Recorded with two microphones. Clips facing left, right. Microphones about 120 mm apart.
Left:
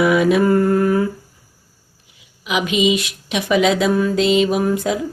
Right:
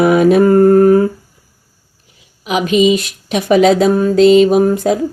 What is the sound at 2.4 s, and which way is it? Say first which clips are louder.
Speech: right 6 dB; 40° right (ahead or behind).